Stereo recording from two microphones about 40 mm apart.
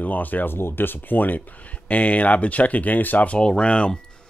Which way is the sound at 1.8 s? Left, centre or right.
Left.